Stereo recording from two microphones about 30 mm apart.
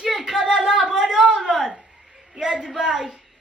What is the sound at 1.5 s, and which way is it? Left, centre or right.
Speech, centre.